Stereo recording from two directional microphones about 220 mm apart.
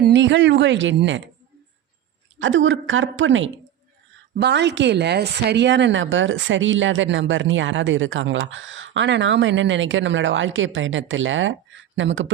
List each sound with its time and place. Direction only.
0.0 s a woman's voice: 55° right (ahead or behind)
2.4 s a woman's voice: 60° right (ahead or behind)